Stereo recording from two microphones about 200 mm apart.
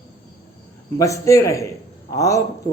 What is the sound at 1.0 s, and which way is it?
Speech, 15° left (ahead or behind).